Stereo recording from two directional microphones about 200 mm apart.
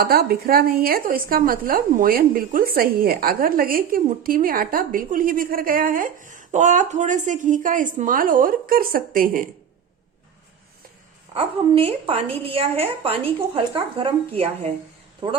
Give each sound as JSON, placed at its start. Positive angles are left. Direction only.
{"t": 0.0, "sound": "speech", "side_deg": -50}
{"t": 11.3, "sound": "a woman's voice", "side_deg": -30}